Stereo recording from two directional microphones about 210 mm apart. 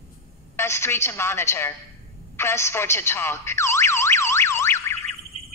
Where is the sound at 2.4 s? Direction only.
10° left (ahead or behind).